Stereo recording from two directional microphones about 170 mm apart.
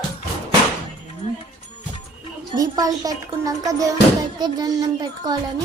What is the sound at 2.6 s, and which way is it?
Speech, 20° right (ahead or behind).